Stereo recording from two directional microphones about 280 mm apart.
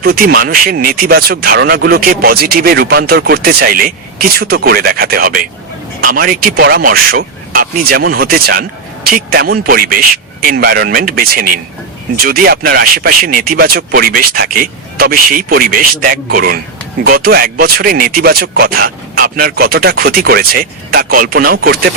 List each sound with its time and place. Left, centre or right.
0.0 s speech: right